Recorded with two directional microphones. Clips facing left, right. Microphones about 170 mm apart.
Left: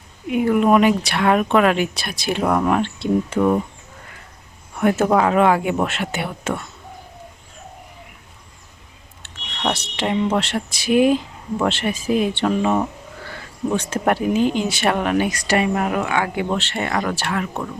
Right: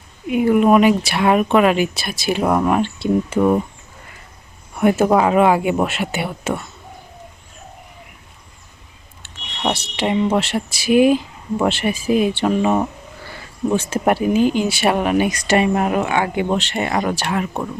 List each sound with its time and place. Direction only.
0.3 s speech: 5° right (ahead or behind)
4.8 s speech: 10° right (ahead or behind)
9.2 s speech: 5° right (ahead or behind)